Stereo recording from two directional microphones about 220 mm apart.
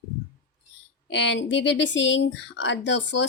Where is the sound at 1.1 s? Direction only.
55° left (ahead or behind).